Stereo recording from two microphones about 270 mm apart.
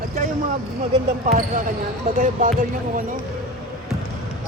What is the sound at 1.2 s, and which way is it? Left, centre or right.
Speech, right.